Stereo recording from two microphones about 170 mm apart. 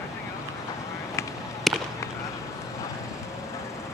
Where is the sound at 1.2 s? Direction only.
15° left (ahead or behind).